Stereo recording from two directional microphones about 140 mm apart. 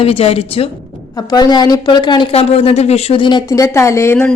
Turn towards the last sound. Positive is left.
turn(degrees=15)  # may be behind; listen again after turning